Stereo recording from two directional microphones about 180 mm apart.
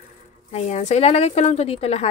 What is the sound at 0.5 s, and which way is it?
Speech, 40° left (ahead or behind).